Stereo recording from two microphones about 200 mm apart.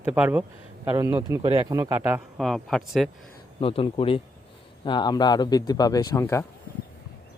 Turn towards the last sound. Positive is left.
turn(degrees=15)  # may be behind; listen again after turning